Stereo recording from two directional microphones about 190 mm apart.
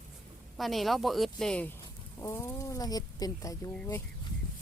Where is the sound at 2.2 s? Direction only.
15° left (ahead or behind).